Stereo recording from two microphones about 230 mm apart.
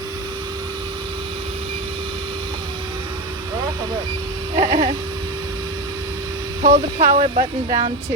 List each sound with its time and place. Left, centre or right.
4.5 s speech: right
6.6 s speech: right